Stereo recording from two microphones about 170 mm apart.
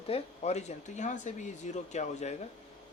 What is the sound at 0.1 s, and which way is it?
Speech, 40° left (ahead or behind).